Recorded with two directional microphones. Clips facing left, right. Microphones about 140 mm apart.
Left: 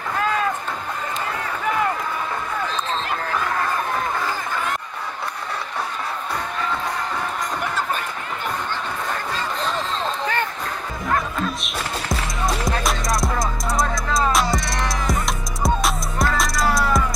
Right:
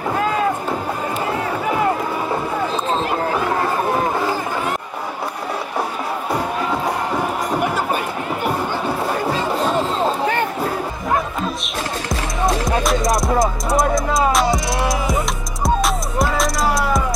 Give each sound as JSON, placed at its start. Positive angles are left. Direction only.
{"t": 1.2, "sound": "run", "side_deg": -20}
{"t": 3.3, "sound": "chatter", "side_deg": -20}
{"t": 3.6, "sound": "run", "side_deg": -30}
{"t": 7.5, "sound": "music", "side_deg": -10}
{"t": 9.1, "sound": "music", "side_deg": -10}
{"t": 9.5, "sound": "music", "side_deg": -40}
{"t": 12.6, "sound": "music", "side_deg": 0}
{"t": 13.4, "sound": "music", "side_deg": -25}
{"t": 14.3, "sound": "music", "side_deg": 0}